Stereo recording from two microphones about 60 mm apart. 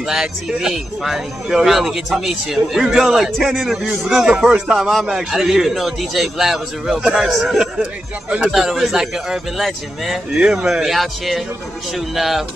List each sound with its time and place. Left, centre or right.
0.0 s speech: centre
7.8 s a man's voice: centre
8.5 s a man's voice: centre